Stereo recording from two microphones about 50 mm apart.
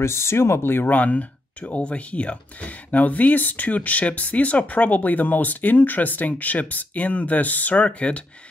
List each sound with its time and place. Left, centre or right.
0.0 s speech: left
0.9 s speech: left